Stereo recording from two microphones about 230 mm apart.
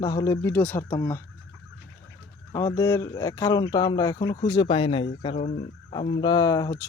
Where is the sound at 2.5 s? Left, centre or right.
Centre.